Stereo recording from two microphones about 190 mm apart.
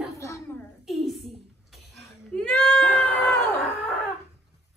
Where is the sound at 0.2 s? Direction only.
15° left (ahead or behind).